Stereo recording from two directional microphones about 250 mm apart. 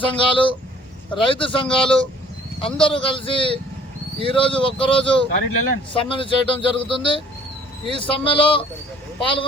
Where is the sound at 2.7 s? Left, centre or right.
Left.